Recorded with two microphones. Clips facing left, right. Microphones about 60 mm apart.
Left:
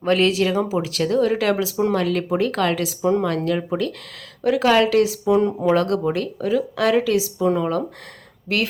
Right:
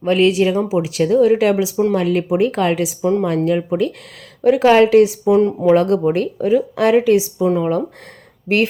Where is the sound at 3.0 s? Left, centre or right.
Centre.